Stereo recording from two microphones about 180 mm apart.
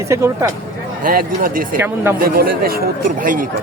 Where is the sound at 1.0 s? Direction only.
50° right (ahead or behind).